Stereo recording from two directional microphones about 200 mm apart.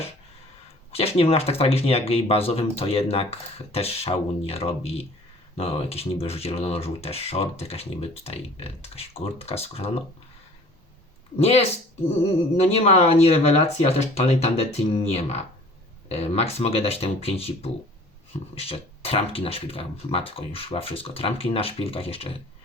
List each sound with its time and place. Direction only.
0.9 s speech: 30° left (ahead or behind)
11.3 s speech: 30° left (ahead or behind)
12.6 s speech: 30° left (ahead or behind)